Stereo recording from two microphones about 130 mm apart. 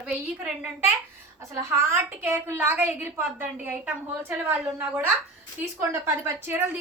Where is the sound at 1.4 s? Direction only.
25° right (ahead or behind).